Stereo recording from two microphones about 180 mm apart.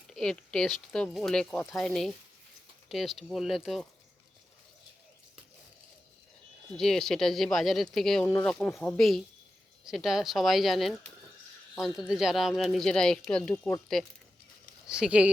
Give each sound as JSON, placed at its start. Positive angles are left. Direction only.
{"t": 0.1, "sound": "speech", "side_deg": 5}
{"t": 6.7, "sound": "speech", "side_deg": 0}